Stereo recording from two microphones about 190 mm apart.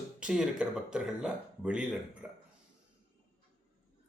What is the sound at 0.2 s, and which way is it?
Speech, 5° right (ahead or behind).